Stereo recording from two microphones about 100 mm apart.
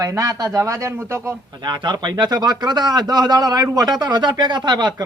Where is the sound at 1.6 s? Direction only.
50° right (ahead or behind).